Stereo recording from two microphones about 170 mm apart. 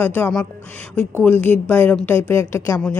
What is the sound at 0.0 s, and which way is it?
A woman's voice, 10° left (ahead or behind).